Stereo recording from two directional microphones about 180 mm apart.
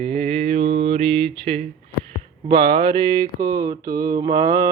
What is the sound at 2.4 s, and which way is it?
Mantra, 25° right (ahead or behind).